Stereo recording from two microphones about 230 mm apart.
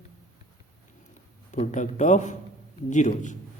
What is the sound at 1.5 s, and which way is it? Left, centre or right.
Speech, left.